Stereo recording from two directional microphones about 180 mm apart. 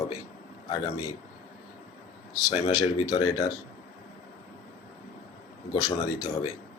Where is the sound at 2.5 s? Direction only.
30° left (ahead or behind).